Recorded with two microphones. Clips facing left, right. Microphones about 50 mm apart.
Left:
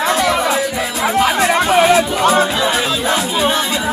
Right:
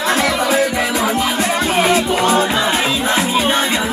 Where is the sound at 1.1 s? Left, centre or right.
Left.